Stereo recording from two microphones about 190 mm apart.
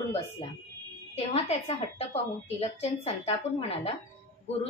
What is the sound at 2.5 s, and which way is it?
Speech, 30° left (ahead or behind).